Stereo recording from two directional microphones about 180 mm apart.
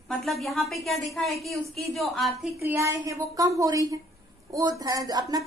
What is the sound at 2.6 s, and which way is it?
A woman's voice, 15° right (ahead or behind).